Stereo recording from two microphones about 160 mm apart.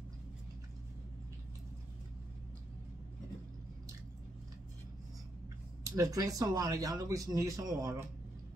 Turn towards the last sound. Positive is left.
turn(degrees=-20)  # may be behind; listen again after turning